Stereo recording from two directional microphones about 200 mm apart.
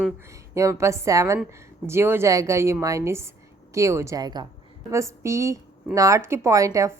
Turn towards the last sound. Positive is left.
turn(degrees=-15)  # may be behind; listen again after turning